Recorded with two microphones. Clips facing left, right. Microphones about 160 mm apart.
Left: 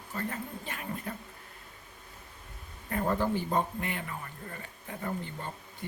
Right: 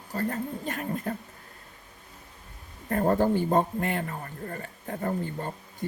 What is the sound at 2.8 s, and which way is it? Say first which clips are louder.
A man's voice: right 6 dB; 45° right (ahead or behind).